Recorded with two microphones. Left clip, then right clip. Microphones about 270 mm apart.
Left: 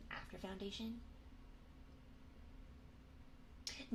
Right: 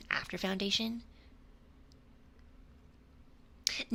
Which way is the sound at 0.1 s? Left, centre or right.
Right.